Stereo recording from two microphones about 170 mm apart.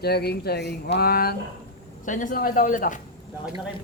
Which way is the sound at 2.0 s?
50° left (ahead or behind).